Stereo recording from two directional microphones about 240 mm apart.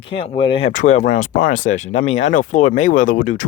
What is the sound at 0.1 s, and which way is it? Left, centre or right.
Speech, left.